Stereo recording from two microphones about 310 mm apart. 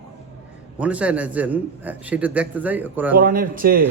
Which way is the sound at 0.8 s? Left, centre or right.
Centre.